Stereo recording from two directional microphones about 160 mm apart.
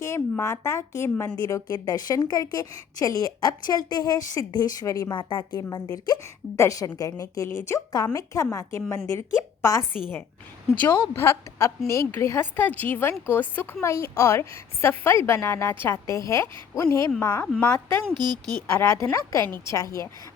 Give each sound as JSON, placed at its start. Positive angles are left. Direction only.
{"t": 0.0, "sound": "a woman's voice", "side_deg": 20}
{"t": 19.3, "sound": "a woman's voice", "side_deg": 15}